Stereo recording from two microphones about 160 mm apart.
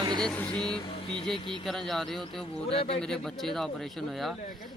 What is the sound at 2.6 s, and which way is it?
Speech, 40° left (ahead or behind).